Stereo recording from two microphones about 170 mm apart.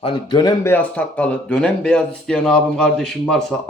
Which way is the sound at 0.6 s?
10° left (ahead or behind).